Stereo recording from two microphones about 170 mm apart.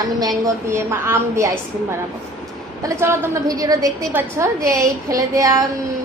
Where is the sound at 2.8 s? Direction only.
15° right (ahead or behind).